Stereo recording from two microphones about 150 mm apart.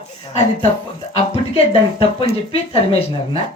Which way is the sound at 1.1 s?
40° left (ahead or behind).